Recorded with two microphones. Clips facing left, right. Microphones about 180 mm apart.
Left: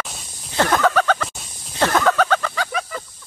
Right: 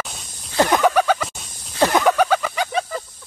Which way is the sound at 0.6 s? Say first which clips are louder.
Right 1 dB; 15° right (ahead or behind).